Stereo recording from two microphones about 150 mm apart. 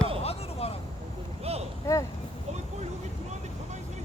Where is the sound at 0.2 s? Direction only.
40° left (ahead or behind).